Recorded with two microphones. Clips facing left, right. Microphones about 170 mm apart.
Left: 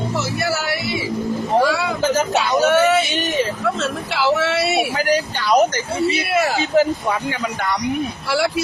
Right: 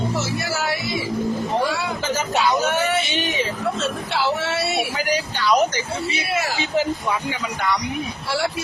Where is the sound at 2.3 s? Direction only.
90° left; by 4.9 s 65° left (ahead or behind).